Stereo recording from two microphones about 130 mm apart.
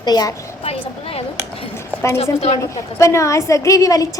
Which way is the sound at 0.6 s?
50° left (ahead or behind).